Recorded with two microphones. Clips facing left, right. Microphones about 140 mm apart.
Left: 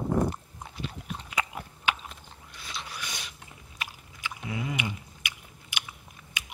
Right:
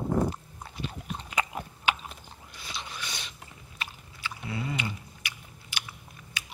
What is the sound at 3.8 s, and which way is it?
Biting, 15° left (ahead or behind).